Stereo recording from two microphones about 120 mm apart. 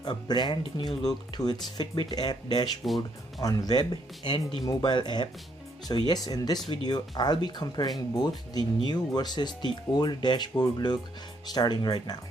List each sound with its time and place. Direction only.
0.0 s speech: 35° left (ahead or behind)